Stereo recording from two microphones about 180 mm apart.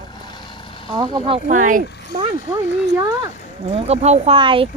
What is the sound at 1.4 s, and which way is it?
Speech, 45° right (ahead or behind).